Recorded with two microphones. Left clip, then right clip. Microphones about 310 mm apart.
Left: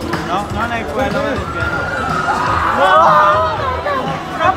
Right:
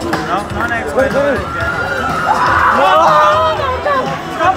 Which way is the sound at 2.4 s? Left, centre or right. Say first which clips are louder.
Right 4 dB; right.